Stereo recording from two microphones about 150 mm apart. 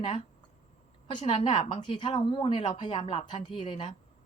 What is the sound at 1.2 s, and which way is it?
Speech, 40° left (ahead or behind).